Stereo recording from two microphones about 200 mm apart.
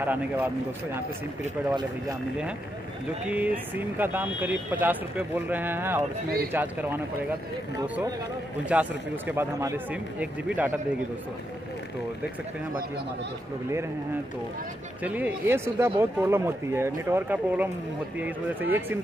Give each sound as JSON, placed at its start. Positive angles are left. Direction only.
{"t": 0.0, "sound": "speech", "side_deg": -10}
{"t": 1.7, "sound": "speech", "side_deg": -20}
{"t": 3.3, "sound": "speech", "side_deg": -5}
{"t": 15.0, "sound": "speech", "side_deg": -10}